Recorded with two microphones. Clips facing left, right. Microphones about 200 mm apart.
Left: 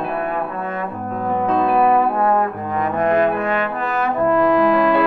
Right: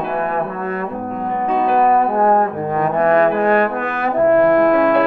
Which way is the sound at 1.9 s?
45° right (ahead or behind).